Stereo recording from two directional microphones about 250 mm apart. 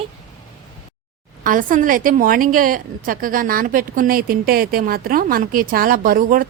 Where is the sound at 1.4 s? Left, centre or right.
Right.